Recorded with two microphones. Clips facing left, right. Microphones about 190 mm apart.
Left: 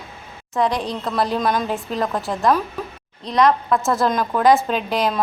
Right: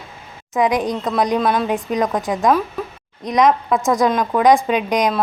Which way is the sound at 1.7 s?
15° right (ahead or behind).